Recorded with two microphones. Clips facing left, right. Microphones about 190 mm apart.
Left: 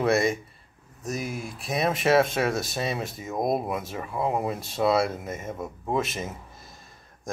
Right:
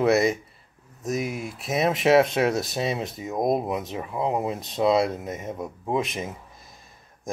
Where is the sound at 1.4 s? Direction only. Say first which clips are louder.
Right 1 dB; 20° right (ahead or behind).